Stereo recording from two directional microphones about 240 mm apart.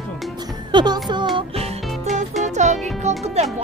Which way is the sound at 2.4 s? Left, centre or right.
Right.